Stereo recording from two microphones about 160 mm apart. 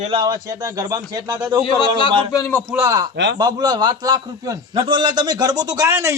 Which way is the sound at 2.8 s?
20° right (ahead or behind).